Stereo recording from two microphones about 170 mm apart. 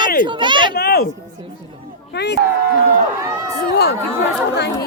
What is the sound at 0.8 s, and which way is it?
Speech, 70° left (ahead or behind).